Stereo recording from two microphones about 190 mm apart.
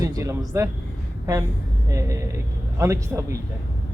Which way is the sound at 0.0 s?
15° right (ahead or behind).